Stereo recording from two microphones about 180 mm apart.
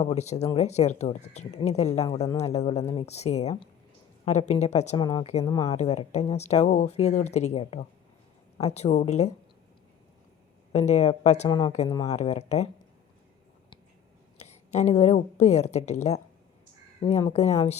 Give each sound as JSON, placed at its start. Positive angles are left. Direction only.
{"t": 0.0, "sound": "speech", "side_deg": 35}
{"t": 4.9, "sound": "speech", "side_deg": 25}
{"t": 5.6, "sound": "speech", "side_deg": 35}
{"t": 10.7, "sound": "speech", "side_deg": 40}
{"t": 11.4, "sound": "speech", "side_deg": 25}
{"t": 14.3, "sound": "a woman's voice", "side_deg": 40}